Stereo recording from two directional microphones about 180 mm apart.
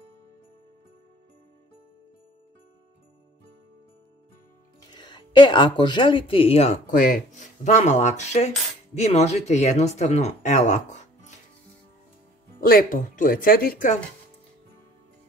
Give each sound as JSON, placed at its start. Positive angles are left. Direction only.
{"t": 4.9, "sound": "speech", "side_deg": 25}
{"t": 12.5, "sound": "speech", "side_deg": 55}